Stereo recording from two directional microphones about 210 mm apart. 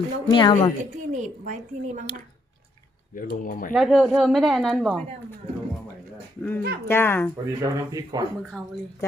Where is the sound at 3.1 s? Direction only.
40° left (ahead or behind).